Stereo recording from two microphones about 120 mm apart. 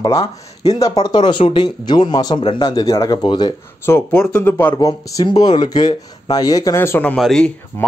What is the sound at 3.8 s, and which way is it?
Speech, 20° left (ahead or behind).